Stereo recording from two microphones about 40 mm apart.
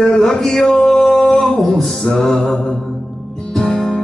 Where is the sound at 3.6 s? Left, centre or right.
Centre.